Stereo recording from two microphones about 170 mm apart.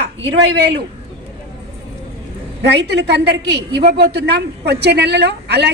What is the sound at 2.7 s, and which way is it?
A woman's voice, 80° right.